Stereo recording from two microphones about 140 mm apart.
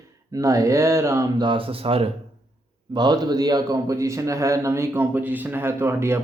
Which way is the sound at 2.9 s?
30° right (ahead or behind).